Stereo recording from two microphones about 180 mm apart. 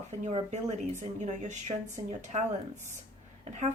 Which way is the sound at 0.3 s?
35° right (ahead or behind).